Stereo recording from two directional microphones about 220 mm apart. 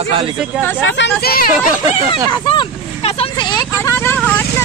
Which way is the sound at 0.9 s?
50° left (ahead or behind).